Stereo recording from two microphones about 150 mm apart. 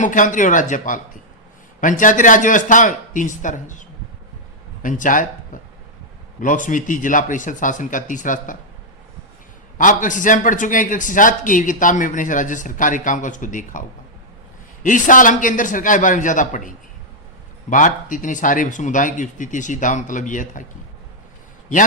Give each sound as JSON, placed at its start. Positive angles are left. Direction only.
{"t": 0.0, "sound": "a man's voice", "side_deg": 60}
{"t": 9.7, "sound": "a man's voice", "side_deg": 60}
{"t": 14.8, "sound": "a man's voice", "side_deg": 60}